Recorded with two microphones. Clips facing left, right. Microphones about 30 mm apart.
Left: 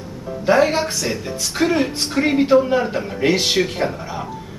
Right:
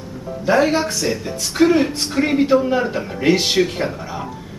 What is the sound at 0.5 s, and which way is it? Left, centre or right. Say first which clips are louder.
A woman's voice: even; centre.